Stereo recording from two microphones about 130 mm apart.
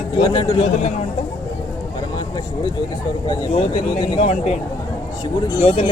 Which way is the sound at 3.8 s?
40° left (ahead or behind).